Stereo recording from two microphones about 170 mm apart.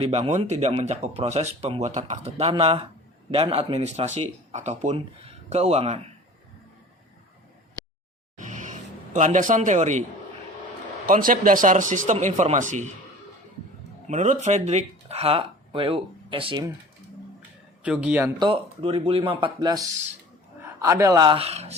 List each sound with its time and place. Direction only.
0.0 s speech: 40° right (ahead or behind)
8.4 s a sound: 45° right (ahead or behind)
11.0 s speech: 55° right (ahead or behind)
14.1 s speech: 45° right (ahead or behind)
17.8 s speech: 10° right (ahead or behind)
18.3 s speech: 30° right (ahead or behind)